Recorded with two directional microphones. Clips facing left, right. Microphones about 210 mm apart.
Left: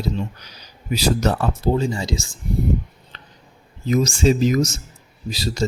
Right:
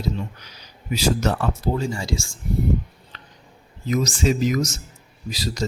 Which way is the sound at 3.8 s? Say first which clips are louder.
Left 4 dB; 30° left (ahead or behind).